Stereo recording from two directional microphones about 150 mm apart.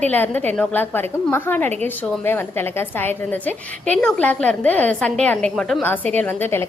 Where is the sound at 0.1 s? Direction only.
10° left (ahead or behind).